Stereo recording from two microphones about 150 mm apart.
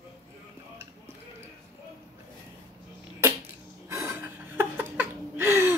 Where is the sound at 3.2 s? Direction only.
20° right (ahead or behind).